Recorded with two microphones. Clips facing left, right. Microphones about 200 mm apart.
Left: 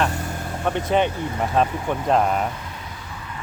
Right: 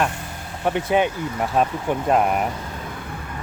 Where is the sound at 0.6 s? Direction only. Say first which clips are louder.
Right 1 dB; 10° right (ahead or behind).